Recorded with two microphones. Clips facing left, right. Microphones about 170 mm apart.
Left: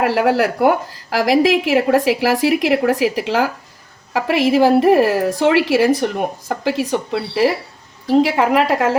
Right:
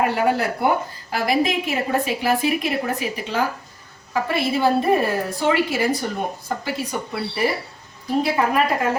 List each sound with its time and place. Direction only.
0.0 s a woman's voice: 90° left